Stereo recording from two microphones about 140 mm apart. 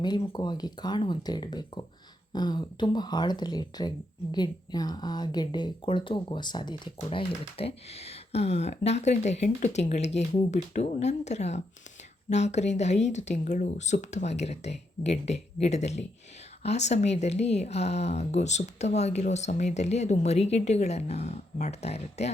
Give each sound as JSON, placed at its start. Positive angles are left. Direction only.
{"t": 0.0, "sound": "speech", "side_deg": 30}